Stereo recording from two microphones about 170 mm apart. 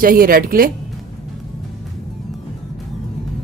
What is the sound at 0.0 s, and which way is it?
Speech, 55° right (ahead or behind).